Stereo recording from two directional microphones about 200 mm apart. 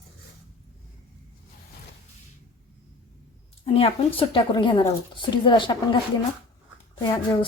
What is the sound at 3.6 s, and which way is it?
Speech, 30° left (ahead or behind).